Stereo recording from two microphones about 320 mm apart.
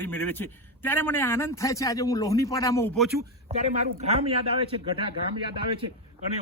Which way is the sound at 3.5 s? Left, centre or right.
Right.